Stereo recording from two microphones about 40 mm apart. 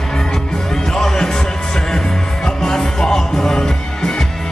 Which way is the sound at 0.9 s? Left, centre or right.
Centre.